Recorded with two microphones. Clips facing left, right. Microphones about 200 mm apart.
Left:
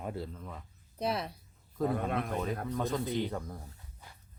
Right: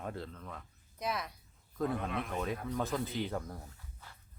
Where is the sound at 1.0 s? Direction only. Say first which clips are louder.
Left 4 dB; 30° left (ahead or behind).